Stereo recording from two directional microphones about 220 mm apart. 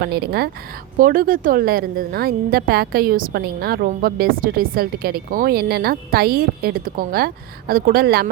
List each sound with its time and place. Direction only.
0.0 s a woman's voice: 45° right (ahead or behind)